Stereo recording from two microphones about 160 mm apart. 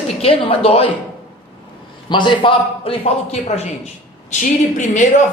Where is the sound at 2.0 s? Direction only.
30° left (ahead or behind).